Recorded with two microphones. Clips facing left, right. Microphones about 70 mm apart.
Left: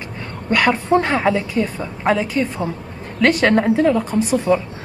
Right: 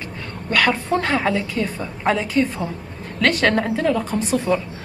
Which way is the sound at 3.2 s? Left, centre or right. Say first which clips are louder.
Left 3 dB; centre.